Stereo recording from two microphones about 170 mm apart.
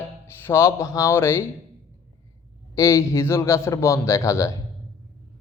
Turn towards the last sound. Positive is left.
turn(degrees=20)  # may be behind; listen again after turning